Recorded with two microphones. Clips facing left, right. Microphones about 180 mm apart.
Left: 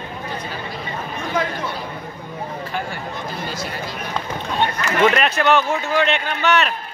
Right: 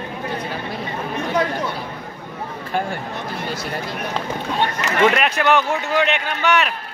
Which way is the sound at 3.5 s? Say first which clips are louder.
Right 2 dB; 60° right (ahead or behind).